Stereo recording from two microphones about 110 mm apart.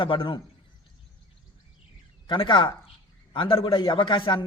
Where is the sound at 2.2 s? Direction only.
50° left (ahead or behind).